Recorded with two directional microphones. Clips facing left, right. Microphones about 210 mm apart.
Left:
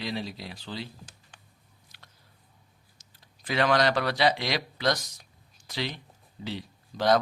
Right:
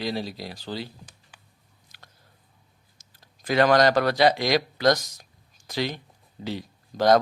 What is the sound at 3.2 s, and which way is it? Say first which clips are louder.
Speech: right 6 dB; 40° right (ahead or behind).